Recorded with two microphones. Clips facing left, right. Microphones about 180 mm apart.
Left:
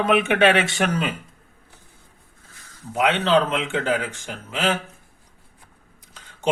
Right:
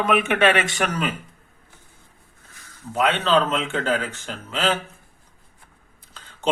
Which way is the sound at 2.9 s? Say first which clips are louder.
Left 1 dB; 15° left (ahead or behind).